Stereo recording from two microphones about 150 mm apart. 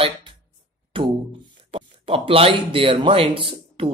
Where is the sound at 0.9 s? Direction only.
35° right (ahead or behind).